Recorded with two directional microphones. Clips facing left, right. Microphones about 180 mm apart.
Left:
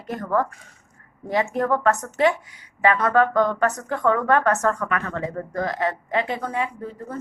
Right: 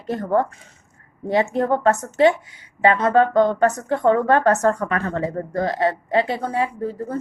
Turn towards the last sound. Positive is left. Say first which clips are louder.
# right 6 dB
turn(degrees=-35)  # may be behind; listen again after turning